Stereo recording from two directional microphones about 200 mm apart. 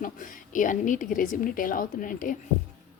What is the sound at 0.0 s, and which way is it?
A woman's voice, 40° left (ahead or behind).